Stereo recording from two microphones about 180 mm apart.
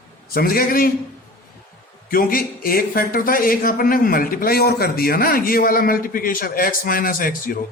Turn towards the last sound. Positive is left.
turn(degrees=50)  # may be behind; listen again after turning